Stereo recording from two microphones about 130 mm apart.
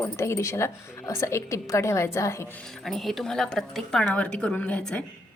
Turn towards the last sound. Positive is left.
turn(degrees=10)  # may be behind; listen again after turning